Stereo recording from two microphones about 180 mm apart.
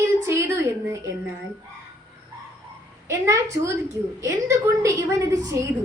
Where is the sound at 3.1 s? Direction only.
15° right (ahead or behind).